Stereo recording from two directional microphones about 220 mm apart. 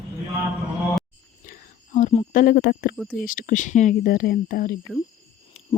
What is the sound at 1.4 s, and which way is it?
Whispering, 35° left (ahead or behind).